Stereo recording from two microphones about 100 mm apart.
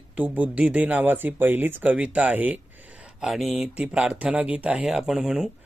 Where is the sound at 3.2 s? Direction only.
Centre (ahead or behind).